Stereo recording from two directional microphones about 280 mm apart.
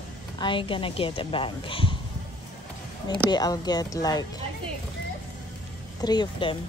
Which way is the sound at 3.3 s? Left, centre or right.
Centre.